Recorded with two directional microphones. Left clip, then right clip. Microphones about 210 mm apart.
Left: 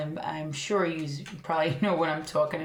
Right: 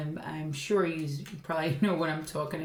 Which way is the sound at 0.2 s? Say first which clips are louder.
Left 5 dB; 25° right (ahead or behind).